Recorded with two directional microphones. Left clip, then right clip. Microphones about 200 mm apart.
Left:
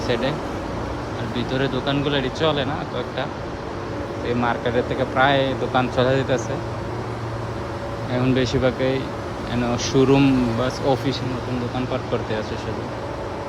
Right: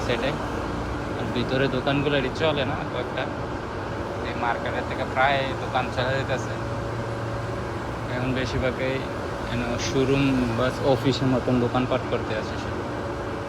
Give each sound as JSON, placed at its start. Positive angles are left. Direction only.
{"t": 0.1, "sound": "speech", "side_deg": 15}
{"t": 1.4, "sound": "speech", "side_deg": 10}
{"t": 5.1, "sound": "speech", "side_deg": 25}
{"t": 8.4, "sound": "speech", "side_deg": 15}